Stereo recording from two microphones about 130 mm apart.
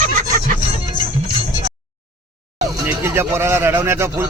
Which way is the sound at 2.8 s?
20° right (ahead or behind).